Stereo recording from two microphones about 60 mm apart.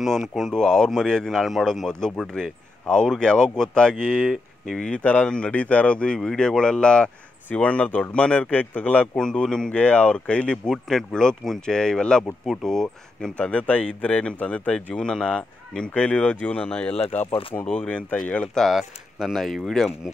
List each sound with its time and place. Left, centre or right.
0.0 s speech: centre
13.5 s speech: left
15.0 s speech: centre
18.7 s speech: centre